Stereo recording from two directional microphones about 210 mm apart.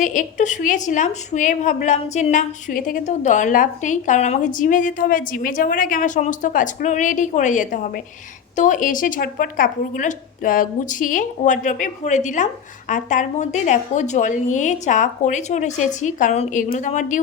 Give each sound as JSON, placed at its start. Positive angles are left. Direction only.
{"t": 0.0, "sound": "a woman's voice", "side_deg": 40}